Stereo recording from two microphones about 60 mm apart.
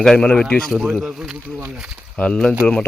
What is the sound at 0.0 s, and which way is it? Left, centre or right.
Speech, centre.